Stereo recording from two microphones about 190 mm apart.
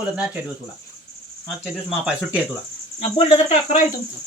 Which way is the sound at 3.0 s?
30° left (ahead or behind).